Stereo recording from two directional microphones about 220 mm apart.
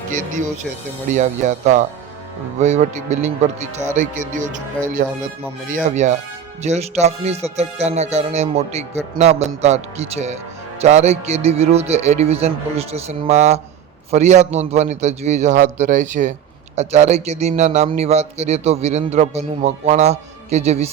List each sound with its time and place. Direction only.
0.1 s speech: 35° right (ahead or behind)